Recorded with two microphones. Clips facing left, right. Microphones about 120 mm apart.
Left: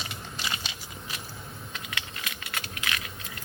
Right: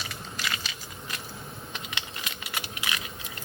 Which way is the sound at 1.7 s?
25° right (ahead or behind).